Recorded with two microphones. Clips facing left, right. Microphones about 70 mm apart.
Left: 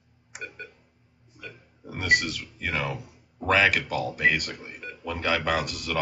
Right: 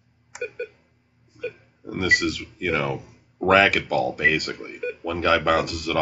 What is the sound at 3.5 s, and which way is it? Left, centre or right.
Speech, centre.